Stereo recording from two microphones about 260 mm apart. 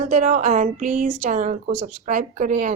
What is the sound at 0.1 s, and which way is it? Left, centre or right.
Speech, right.